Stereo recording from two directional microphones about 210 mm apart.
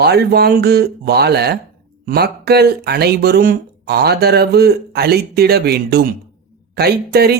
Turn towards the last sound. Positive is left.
turn(degrees=-50)  # may be behind; listen again after turning